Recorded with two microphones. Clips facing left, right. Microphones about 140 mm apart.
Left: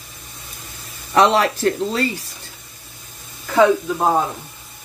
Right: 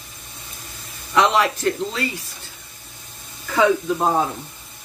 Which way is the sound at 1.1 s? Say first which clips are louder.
Left 3 dB; 30° left (ahead or behind).